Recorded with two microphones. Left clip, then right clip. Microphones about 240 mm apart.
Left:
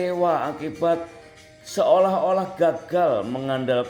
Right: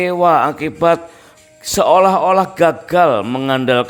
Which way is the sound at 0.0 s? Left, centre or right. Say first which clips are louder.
Right 9 dB; right.